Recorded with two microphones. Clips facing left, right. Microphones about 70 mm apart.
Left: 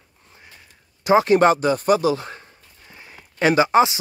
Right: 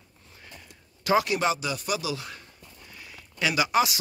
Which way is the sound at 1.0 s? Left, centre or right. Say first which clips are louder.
Left 9 dB; left.